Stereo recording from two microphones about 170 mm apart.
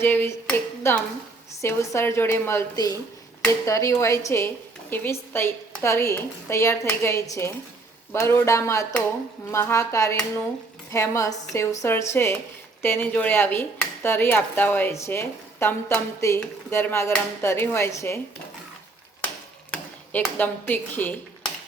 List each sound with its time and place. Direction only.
0.0 s speech: 15° left (ahead or behind)
19.7 s speech: 10° left (ahead or behind)